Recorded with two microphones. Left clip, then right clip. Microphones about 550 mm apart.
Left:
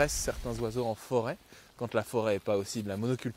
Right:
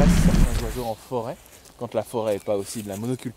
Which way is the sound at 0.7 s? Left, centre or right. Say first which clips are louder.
Right 2 dB; left.